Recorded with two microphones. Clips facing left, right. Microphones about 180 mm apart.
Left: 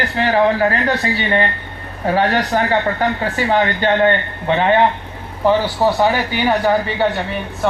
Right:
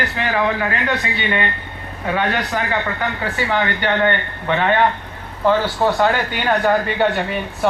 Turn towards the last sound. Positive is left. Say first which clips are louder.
# even
turn(degrees=0)  # may be behind; listen again after turning